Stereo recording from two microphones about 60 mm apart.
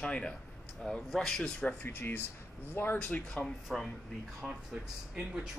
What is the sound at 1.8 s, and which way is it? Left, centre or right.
Speech, left.